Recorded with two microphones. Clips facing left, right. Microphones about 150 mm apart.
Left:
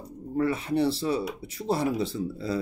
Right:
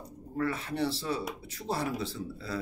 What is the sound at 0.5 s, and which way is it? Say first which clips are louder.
Speech: left 7 dB; 15° left (ahead or behind).